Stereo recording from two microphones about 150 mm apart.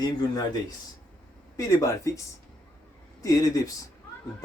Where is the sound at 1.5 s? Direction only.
20° left (ahead or behind).